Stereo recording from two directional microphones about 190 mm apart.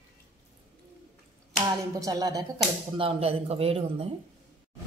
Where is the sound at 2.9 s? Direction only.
30° right (ahead or behind).